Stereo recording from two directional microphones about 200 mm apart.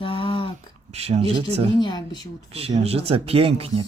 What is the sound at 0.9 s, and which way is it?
Speech, 30° right (ahead or behind).